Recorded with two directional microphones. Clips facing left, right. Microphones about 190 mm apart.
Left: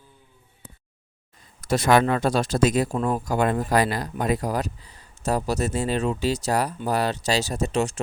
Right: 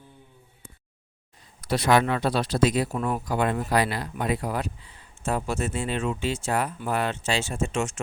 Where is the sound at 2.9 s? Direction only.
30° left (ahead or behind).